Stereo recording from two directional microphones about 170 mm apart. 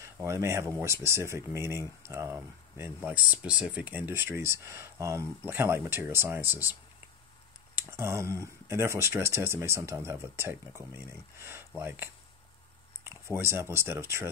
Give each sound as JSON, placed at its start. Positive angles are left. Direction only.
{"t": 0.0, "sound": "speech", "side_deg": -15}